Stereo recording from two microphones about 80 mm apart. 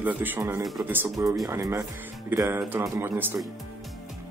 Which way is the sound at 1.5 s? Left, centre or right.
Right.